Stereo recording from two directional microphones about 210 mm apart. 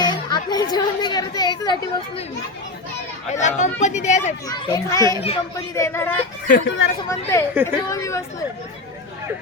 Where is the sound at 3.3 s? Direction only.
35° left (ahead or behind).